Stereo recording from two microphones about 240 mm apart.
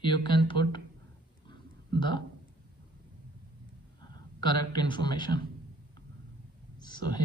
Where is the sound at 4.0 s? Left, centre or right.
Centre.